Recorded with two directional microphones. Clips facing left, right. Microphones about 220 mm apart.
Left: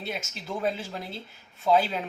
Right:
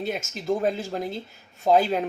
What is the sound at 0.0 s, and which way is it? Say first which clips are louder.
Speech: right 6 dB; 45° right (ahead or behind).